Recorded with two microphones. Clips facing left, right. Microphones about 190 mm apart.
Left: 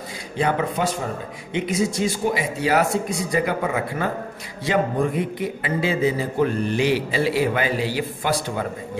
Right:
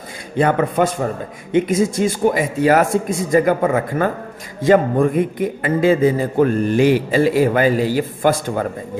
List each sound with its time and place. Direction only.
0.4 s a man's voice: 55° right (ahead or behind)